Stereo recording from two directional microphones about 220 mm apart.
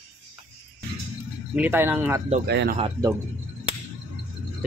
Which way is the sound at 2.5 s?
45° right (ahead or behind).